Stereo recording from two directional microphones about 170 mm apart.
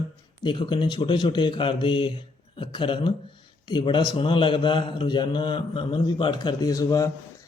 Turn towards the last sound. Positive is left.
turn(degrees=20)  # may be behind; listen again after turning